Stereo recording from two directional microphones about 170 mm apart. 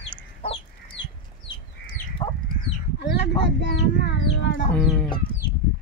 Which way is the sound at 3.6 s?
90° left.